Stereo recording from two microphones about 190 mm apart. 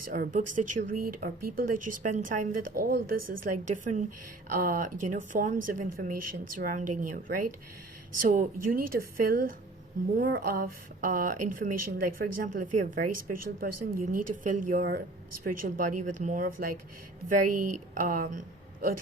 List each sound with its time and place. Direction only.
0.1 s speech: 45° right (ahead or behind)